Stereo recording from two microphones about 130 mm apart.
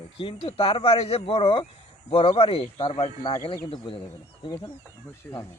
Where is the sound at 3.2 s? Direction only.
35° left (ahead or behind).